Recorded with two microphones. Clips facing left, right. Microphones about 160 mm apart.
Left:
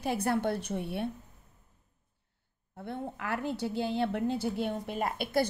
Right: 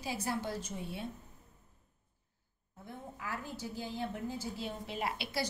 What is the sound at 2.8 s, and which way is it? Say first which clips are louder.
A woman's voice: left 9 dB; 70° left (ahead or behind).